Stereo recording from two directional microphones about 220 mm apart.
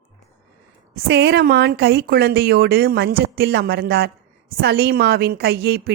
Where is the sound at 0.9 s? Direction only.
50° right (ahead or behind).